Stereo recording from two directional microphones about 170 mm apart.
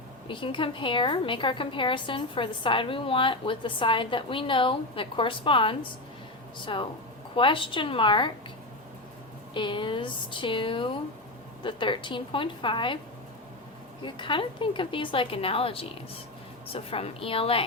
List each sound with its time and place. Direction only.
0.3 s a woman's voice: 30° left (ahead or behind)
9.6 s a woman's voice: 30° left (ahead or behind)
14.0 s a woman's voice: 30° left (ahead or behind)